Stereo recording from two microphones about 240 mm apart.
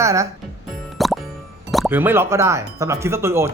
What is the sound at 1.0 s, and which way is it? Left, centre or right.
Plop, centre.